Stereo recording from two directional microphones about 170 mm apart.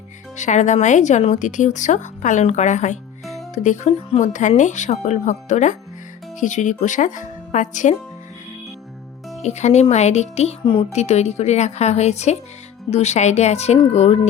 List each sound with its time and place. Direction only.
0.3 s speech: 45° left (ahead or behind)
9.4 s a woman's voice: 40° left (ahead or behind)
10.9 s a woman's voice: 40° left (ahead or behind)